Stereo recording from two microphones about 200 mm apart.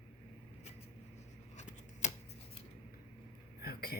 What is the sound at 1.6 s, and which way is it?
Scissors, 35° left (ahead or behind).